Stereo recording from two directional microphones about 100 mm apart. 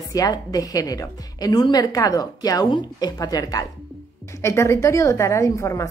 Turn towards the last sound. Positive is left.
turn(degrees=30)  # may be behind; listen again after turning